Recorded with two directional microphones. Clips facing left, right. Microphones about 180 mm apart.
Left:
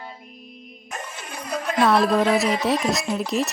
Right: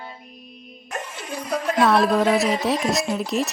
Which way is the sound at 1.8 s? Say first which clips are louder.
Even; centre (ahead or behind).